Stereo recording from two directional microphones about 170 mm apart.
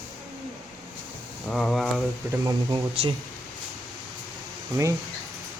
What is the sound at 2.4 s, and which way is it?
Speech, 30° right (ahead or behind).